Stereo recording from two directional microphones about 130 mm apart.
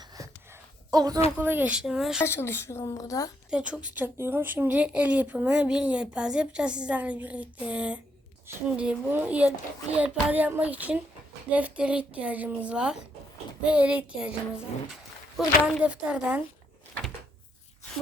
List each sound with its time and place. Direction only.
0.9 s a woman's voice: 30° right (ahead or behind)
1.4 s speech: 15° right (ahead or behind)
2.2 s a woman's voice: 20° left (ahead or behind)
3.5 s speech: 10° right (ahead or behind)